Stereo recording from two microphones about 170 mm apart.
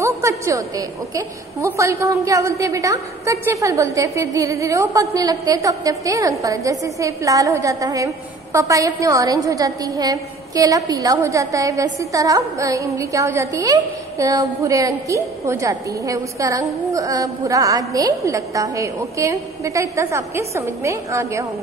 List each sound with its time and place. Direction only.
0.0 s a woman's voice: 20° right (ahead or behind)